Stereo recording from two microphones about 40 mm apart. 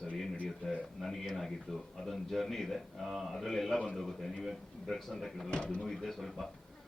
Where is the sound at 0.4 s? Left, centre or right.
Centre.